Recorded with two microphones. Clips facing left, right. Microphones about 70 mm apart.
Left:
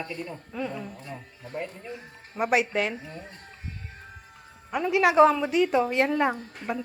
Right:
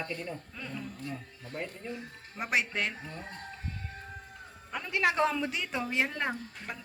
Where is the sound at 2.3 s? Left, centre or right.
Centre.